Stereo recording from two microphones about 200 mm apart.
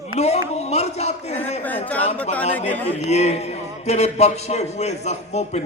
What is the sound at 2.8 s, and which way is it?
A man's voice, 35° left (ahead or behind).